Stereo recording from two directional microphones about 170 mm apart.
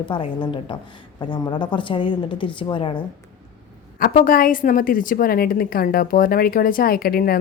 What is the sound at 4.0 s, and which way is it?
A woman's voice, 55° left (ahead or behind).